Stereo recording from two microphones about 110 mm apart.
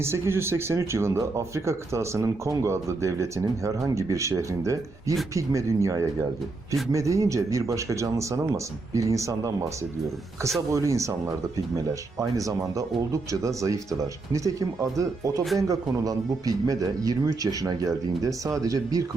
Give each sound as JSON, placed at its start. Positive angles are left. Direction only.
{"t": 0.0, "sound": "speech", "side_deg": -25}
{"t": 10.7, "sound": "speech", "side_deg": -30}
{"t": 12.4, "sound": "speech", "side_deg": -30}